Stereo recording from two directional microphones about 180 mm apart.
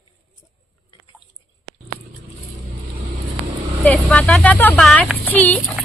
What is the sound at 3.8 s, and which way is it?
Speech, 5° left (ahead or behind).